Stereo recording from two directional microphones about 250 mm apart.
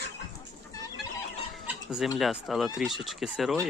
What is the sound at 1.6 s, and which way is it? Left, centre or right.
Speech, centre.